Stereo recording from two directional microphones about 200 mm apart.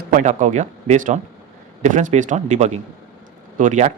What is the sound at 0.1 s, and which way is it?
Speech, 40° right (ahead or behind).